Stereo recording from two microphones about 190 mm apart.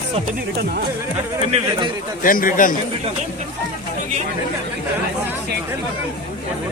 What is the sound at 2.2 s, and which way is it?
Speech, 45° left (ahead or behind).